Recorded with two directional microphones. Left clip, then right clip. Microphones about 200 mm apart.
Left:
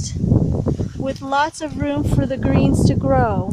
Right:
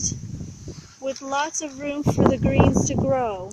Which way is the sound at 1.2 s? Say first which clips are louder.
Left 7 dB; 10° left (ahead or behind).